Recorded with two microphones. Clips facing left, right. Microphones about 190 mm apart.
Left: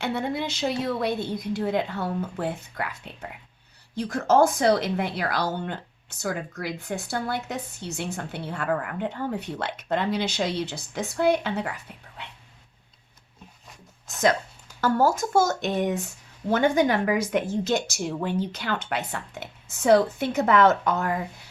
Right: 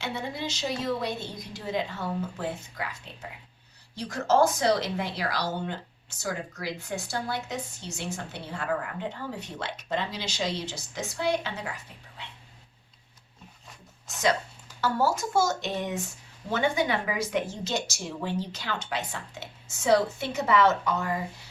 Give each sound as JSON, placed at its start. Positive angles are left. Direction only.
{"t": 0.0, "sound": "speech", "side_deg": 55}
{"t": 14.8, "sound": "speech", "side_deg": 50}